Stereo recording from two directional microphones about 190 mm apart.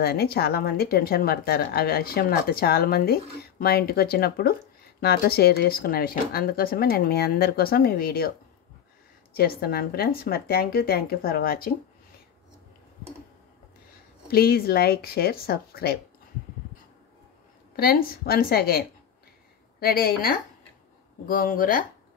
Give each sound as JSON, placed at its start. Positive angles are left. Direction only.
{"t": 0.0, "sound": "speech", "side_deg": 55}
{"t": 9.3, "sound": "speech", "side_deg": 55}
{"t": 14.3, "sound": "speech", "side_deg": 55}
{"t": 17.7, "sound": "speech", "side_deg": 50}